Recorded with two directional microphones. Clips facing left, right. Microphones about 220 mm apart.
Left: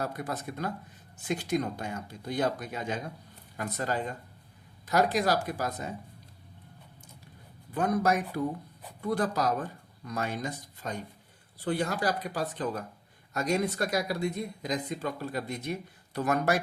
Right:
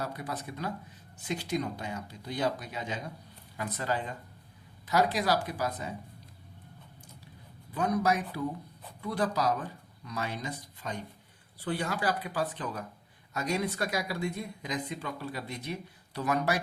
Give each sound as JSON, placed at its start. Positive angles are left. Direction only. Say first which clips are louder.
{"t": 0.0, "sound": "speech", "louder": "left 3 dB", "side_deg": 50}
{"t": 7.7, "sound": "speech", "louder": "left 2 dB", "side_deg": 50}